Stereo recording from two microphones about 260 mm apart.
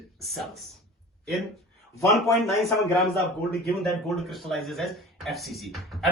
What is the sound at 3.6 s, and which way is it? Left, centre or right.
Speech, centre.